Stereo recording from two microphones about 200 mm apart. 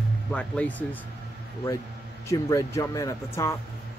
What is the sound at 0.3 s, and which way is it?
Speech, 5° left (ahead or behind).